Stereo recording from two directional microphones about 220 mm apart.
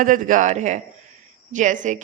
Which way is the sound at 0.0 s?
35° right (ahead or behind).